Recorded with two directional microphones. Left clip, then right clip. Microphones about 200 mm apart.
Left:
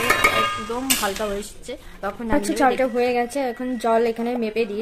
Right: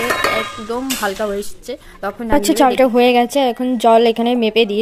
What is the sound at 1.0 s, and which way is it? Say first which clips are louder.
Speech: right 5 dB; 30° right (ahead or behind).